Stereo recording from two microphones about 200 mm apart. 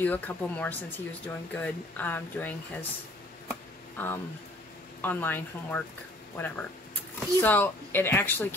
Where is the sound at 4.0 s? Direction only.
10° left (ahead or behind).